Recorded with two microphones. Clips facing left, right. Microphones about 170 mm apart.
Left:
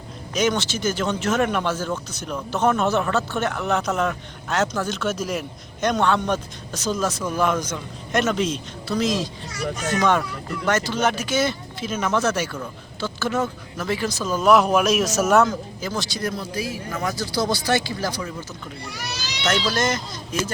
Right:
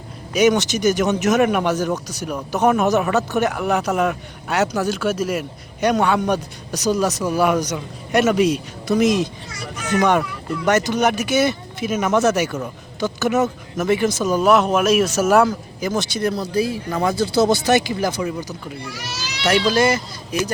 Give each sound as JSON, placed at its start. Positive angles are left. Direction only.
{"t": 0.3, "sound": "speech", "side_deg": -15}
{"t": 6.7, "sound": "speech", "side_deg": -40}
{"t": 7.0, "sound": "speech", "side_deg": -10}
{"t": 14.4, "sound": "a man's voice", "side_deg": 0}
{"t": 16.4, "sound": "speech", "side_deg": -35}
{"t": 19.5, "sound": "speech", "side_deg": -10}